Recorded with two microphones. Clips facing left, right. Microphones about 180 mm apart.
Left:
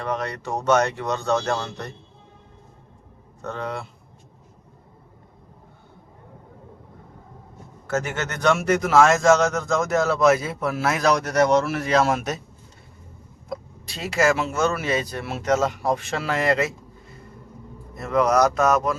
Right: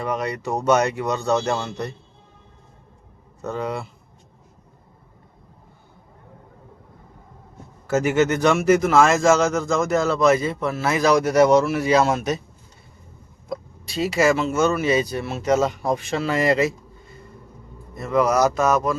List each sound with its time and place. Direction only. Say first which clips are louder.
0.0 s speech: right 2 dB; 10° right (ahead or behind)
3.4 s speech: right 3 dB; 10° right (ahead or behind)
7.9 s speech: right 8 dB; 10° right (ahead or behind)
13.5 s speech: right 3 dB; centre (ahead or behind)